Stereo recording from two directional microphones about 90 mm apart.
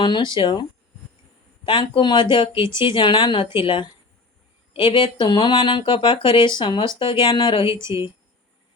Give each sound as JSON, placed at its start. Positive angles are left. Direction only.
{"t": 0.0, "sound": "speech", "side_deg": 60}
{"t": 7.7, "sound": "speech", "side_deg": -30}